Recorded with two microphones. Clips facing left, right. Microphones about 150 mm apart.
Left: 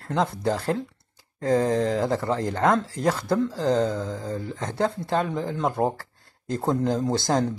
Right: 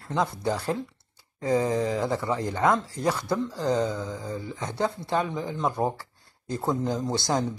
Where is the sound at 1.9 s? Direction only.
55° left (ahead or behind).